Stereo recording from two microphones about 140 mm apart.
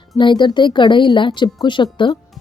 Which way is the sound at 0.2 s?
35° left (ahead or behind).